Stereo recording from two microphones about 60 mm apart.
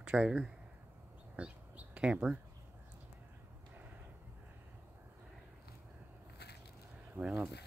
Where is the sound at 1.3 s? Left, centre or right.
Centre.